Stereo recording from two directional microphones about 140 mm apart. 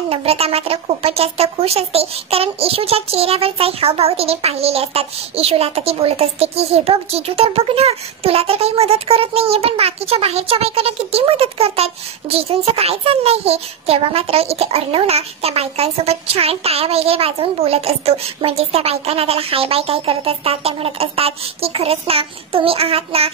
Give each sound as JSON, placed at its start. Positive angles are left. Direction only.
{"t": 0.1, "sound": "a woman's voice", "side_deg": -45}